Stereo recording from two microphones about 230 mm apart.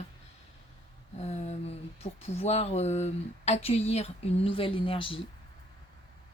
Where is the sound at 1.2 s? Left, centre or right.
Left.